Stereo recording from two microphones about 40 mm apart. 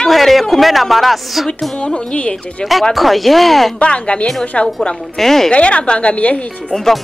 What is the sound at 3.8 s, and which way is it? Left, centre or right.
Speech, left.